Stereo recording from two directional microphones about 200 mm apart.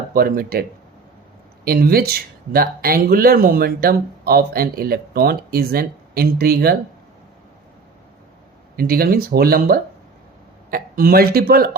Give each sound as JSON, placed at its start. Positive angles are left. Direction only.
{"t": 0.1, "sound": "speech", "side_deg": -45}
{"t": 1.6, "sound": "speech", "side_deg": -50}
{"t": 8.7, "sound": "speech", "side_deg": -50}